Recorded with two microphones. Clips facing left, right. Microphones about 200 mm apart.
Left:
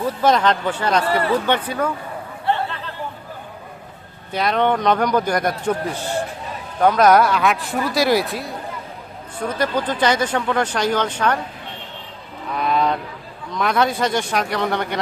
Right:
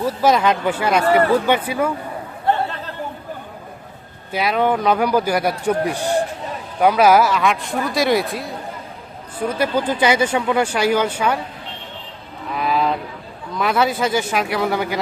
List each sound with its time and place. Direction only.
0.2 s speech: 10° right (ahead or behind)
1.0 s speech: 45° right (ahead or behind)
1.5 s speech: 10° right (ahead or behind)
2.5 s chatter: 45° right (ahead or behind)
4.3 s speech: 5° right (ahead or behind)
12.5 s a sound: 5° right (ahead or behind)
13.5 s speech: 5° right (ahead or behind)